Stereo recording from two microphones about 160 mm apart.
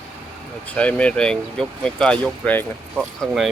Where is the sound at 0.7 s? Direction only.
10° left (ahead or behind).